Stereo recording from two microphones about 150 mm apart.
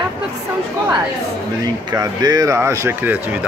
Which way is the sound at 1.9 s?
25° right (ahead or behind).